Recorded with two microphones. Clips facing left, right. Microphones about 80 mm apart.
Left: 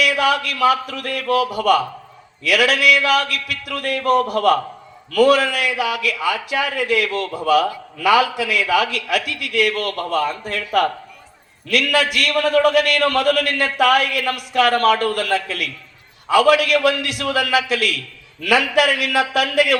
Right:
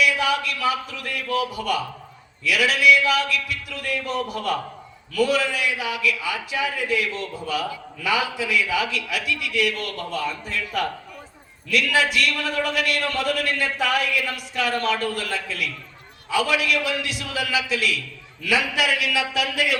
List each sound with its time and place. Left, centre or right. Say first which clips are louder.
0.0 s a man's voice: left 4 dB; left